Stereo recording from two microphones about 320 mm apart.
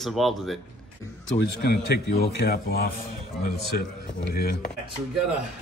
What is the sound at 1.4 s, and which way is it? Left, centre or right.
A man's voice, left.